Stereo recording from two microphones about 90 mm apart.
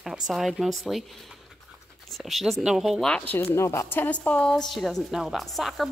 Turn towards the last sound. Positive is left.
turn(degrees=0)  # may be behind; listen again after turning